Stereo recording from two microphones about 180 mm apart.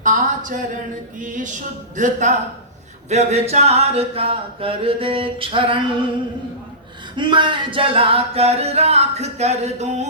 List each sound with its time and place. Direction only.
0.0 s a sound: 45° right (ahead or behind)
1.2 s a man's voice: 45° right (ahead or behind)
3.1 s singing: 40° right (ahead or behind)
7.2 s singing: 25° right (ahead or behind)